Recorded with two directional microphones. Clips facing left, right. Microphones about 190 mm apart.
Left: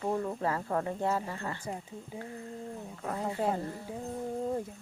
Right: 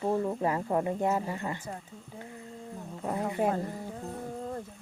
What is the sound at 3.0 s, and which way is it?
Speech, 15° right (ahead or behind).